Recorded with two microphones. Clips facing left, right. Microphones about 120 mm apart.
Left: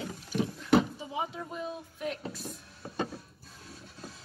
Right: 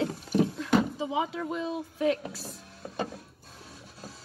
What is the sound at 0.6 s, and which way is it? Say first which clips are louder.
Speech: even; 90° right.